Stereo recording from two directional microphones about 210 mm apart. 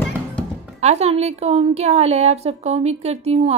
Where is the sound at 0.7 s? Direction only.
30° right (ahead or behind).